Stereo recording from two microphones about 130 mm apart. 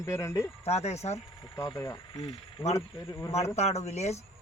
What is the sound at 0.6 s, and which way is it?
Speech, 55° left (ahead or behind).